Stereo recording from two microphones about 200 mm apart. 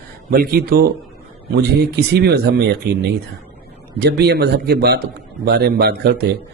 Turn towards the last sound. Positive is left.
turn(degrees=-55)  # may be behind; listen again after turning